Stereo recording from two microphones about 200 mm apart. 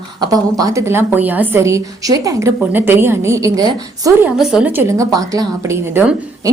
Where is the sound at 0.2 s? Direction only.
20° right (ahead or behind).